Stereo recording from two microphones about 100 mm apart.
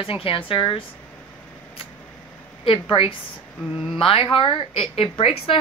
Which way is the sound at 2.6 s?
65° left (ahead or behind).